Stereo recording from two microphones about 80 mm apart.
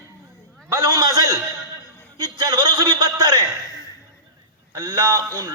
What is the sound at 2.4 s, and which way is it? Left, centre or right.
A man's voice, right.